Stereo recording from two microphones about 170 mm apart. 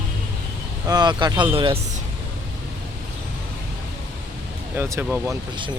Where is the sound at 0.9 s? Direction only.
25° right (ahead or behind).